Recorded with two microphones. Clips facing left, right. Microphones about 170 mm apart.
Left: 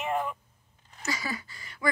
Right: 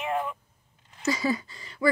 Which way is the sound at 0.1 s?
Centre (ahead or behind).